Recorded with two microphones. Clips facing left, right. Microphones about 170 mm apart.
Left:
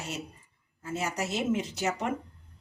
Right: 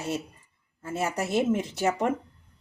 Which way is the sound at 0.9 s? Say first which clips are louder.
Right 5 dB; 55° right (ahead or behind).